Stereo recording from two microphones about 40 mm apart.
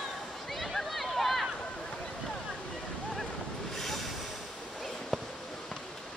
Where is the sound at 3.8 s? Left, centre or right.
Centre.